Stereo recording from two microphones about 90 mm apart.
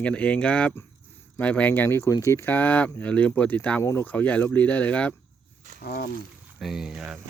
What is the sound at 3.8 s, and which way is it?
Speech, 25° left (ahead or behind).